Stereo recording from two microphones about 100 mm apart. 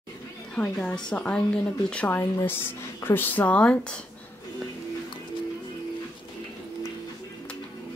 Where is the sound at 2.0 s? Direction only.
20° left (ahead or behind).